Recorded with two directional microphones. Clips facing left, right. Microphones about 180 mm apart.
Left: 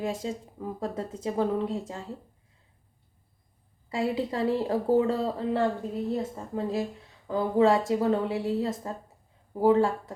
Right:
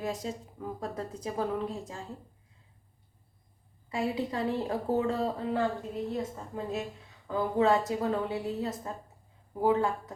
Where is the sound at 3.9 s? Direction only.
30° left (ahead or behind).